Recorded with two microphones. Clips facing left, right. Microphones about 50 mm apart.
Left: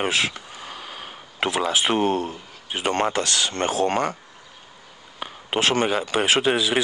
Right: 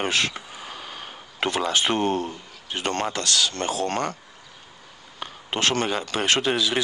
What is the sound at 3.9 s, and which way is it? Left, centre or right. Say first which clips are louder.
Speech: left 3 dB; centre.